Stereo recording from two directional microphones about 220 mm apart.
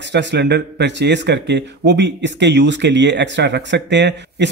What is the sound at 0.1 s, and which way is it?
Speech, 50° right (ahead or behind).